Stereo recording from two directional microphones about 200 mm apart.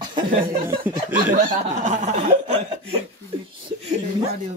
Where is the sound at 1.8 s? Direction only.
35° right (ahead or behind).